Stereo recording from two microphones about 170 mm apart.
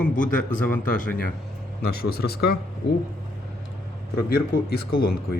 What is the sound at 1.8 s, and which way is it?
Speech, 65° left (ahead or behind).